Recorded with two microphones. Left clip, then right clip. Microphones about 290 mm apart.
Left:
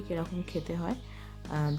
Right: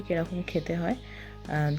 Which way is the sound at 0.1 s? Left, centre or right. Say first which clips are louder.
Right 6 dB; centre.